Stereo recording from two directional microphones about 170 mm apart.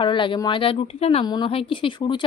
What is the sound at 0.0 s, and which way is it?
A woman's voice, 30° left (ahead or behind).